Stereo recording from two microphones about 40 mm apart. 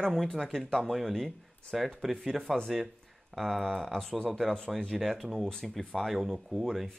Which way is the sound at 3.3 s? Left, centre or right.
Centre.